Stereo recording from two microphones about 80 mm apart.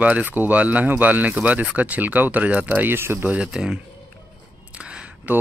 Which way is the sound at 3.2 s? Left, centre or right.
Centre.